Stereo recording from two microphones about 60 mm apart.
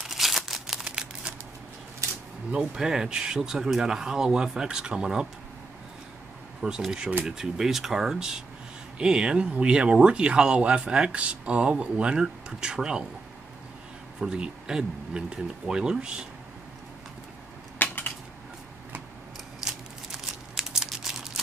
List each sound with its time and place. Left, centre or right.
0.0 s crumpling: centre
0.8 s a sound: centre
2.5 s speech: centre
6.8 s speech: centre
14.2 s speech: centre
17.8 s typewriter: left
19.6 s crumpling: centre